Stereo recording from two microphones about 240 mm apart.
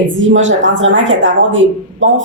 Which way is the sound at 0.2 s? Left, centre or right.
Right.